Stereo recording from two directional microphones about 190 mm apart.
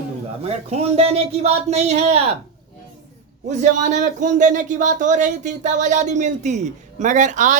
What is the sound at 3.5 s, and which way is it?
Speech, 40° right (ahead or behind).